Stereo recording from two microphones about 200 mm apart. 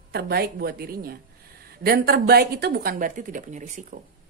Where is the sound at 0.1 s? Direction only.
50° right (ahead or behind).